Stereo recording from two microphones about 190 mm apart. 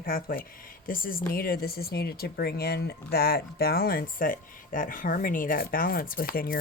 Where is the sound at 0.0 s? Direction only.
50° left (ahead or behind).